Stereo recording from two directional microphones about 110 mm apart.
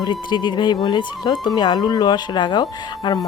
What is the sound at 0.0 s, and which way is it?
A woman's voice, 40° left (ahead or behind).